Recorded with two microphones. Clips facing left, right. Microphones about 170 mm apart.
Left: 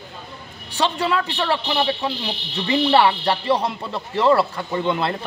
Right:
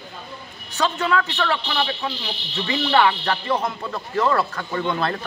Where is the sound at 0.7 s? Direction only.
30° left (ahead or behind).